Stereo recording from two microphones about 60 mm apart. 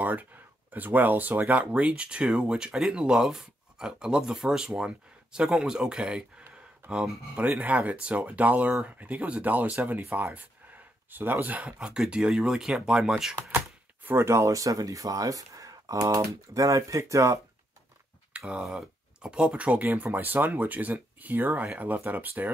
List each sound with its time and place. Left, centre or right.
0.0 s speech: right; by 6.2 s centre
7.3 s speech: right
14.0 s speech: right
16.2 s speech: right
18.6 s speech: centre; by 22.5 s right